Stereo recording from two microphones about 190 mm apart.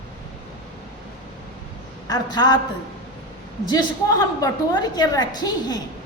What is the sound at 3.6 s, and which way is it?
A woman's voice, 20° left (ahead or behind).